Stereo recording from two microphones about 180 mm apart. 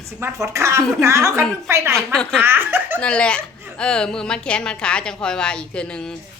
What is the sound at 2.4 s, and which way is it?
Laughter, 10° right (ahead or behind).